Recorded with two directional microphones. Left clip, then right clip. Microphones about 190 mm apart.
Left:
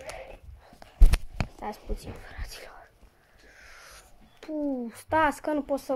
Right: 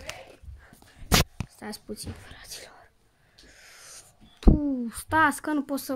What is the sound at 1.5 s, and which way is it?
Speech, 45° right (ahead or behind).